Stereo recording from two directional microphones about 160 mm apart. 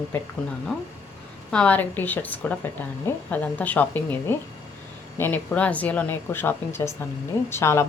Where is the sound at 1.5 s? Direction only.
10° left (ahead or behind).